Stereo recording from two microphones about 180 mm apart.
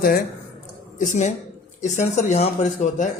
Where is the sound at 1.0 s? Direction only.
40° left (ahead or behind).